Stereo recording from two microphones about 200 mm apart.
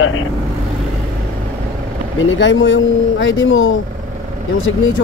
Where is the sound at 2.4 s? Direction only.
70° left (ahead or behind).